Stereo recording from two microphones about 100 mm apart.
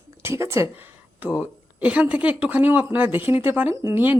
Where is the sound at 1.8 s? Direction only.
15° right (ahead or behind).